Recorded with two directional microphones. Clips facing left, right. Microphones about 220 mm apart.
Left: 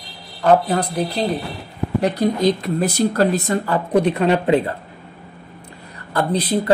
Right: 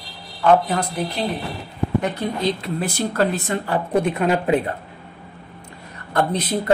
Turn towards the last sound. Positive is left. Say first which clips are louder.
# left 2 dB
turn(degrees=35)  # may be behind; listen again after turning